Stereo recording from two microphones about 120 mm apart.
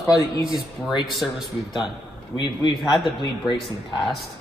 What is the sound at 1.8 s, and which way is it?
A man's voice, 40° left (ahead or behind).